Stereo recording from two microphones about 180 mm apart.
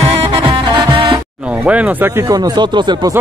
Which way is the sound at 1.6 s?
5° right (ahead or behind).